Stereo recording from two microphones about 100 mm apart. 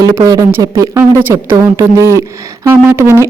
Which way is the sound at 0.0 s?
35° right (ahead or behind).